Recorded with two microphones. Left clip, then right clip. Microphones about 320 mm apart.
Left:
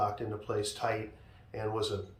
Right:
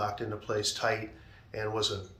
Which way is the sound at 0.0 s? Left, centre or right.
Centre.